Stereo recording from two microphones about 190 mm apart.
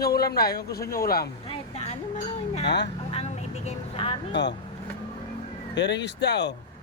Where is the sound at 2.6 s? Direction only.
65° left (ahead or behind).